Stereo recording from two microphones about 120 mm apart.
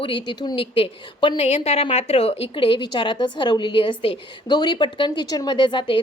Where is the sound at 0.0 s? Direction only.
45° left (ahead or behind).